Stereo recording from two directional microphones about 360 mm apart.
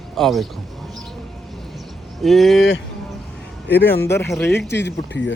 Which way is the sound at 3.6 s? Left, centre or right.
Left.